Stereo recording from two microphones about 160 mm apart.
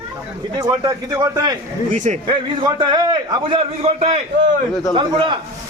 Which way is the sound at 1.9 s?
50° right (ahead or behind).